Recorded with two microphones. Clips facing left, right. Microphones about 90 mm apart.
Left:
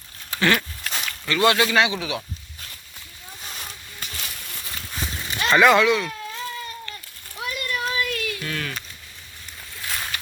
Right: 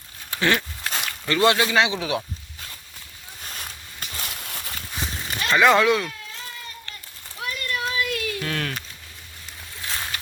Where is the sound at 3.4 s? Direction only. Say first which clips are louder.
Even; centre (ahead or behind).